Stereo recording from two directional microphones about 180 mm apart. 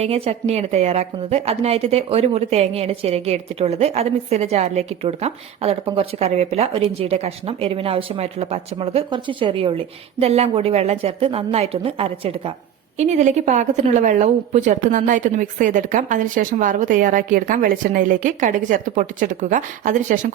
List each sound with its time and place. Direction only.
0.0 s a woman's voice: 35° right (ahead or behind)